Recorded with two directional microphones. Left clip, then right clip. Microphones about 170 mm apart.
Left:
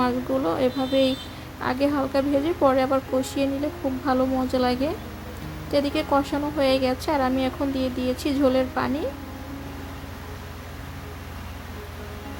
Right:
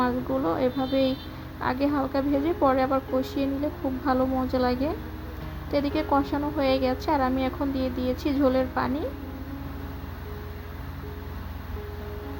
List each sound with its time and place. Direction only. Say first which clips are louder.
0.0 s a woman's voice: left 2 dB; 5° left (ahead or behind)